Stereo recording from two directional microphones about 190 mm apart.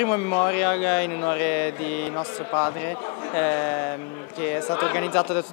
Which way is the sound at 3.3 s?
15° left (ahead or behind).